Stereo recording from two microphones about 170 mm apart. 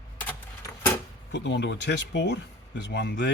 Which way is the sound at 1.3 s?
90° left.